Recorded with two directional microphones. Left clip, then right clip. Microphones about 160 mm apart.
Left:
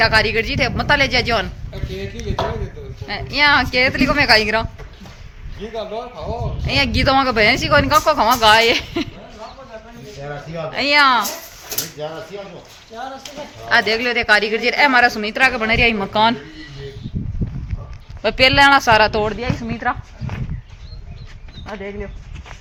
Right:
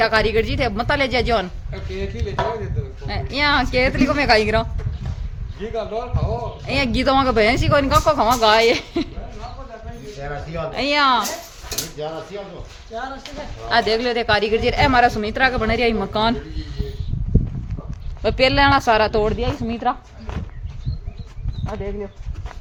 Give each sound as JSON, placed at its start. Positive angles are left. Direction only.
{"t": 0.0, "sound": "a woman's voice", "side_deg": -5}
{"t": 3.1, "sound": "a woman's voice", "side_deg": 0}
{"t": 5.7, "sound": "a woman's voice", "side_deg": 0}
{"t": 10.7, "sound": "a woman's voice", "side_deg": 0}
{"t": 12.0, "sound": "speech", "side_deg": 55}
{"t": 13.7, "sound": "a woman's voice", "side_deg": 5}
{"t": 18.2, "sound": "a woman's voice", "side_deg": 5}
{"t": 19.9, "sound": "speech", "side_deg": -15}
{"t": 21.7, "sound": "a woman's voice", "side_deg": 5}